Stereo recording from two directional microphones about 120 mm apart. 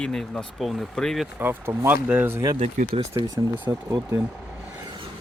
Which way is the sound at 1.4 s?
15° right (ahead or behind).